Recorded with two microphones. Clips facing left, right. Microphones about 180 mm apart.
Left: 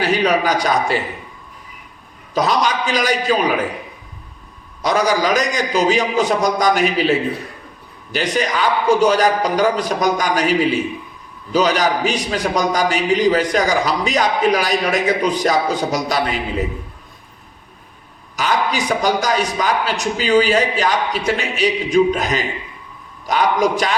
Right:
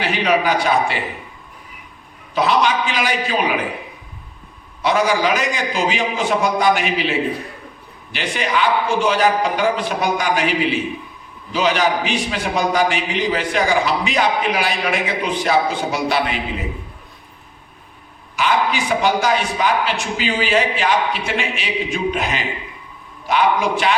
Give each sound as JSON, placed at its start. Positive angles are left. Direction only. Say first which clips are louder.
{"t": 0.0, "sound": "a man's voice", "louder": "left 2 dB", "side_deg": 40}
{"t": 2.3, "sound": "a man's voice", "louder": "right 1 dB", "side_deg": 40}
{"t": 4.8, "sound": "a man's voice", "louder": "even", "side_deg": 40}
{"t": 18.3, "sound": "a man's voice", "louder": "even", "side_deg": 40}